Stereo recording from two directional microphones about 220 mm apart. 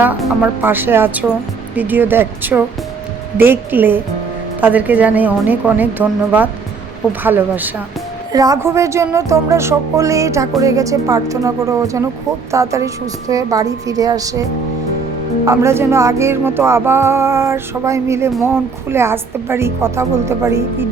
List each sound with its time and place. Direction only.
0.0 s music: 10° right (ahead or behind)
15.4 s music: 10° right (ahead or behind)